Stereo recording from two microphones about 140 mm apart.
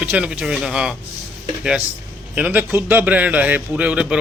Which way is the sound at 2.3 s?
10° right (ahead or behind).